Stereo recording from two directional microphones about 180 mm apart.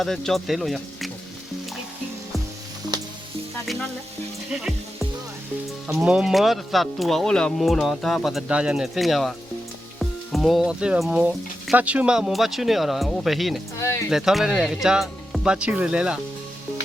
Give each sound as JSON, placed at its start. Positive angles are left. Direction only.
{"t": 0.0, "sound": "speech", "side_deg": 0}
{"t": 2.9, "sound": "music", "side_deg": -20}
{"t": 5.9, "sound": "speech", "side_deg": -5}
{"t": 13.7, "sound": "speech", "side_deg": 15}
{"t": 14.1, "sound": "speech", "side_deg": -5}